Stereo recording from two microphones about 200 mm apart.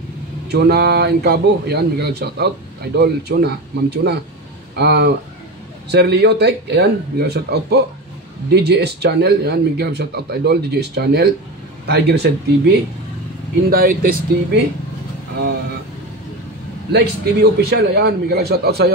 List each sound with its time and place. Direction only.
0.5 s a man's voice: 55° right (ahead or behind)
13.7 s a man's voice: 45° right (ahead or behind)
16.9 s a man's voice: 50° right (ahead or behind)